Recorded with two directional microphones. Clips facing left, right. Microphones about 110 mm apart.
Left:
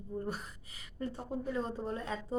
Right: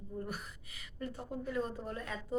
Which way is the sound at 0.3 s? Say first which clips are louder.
Left 4 dB; 30° left (ahead or behind).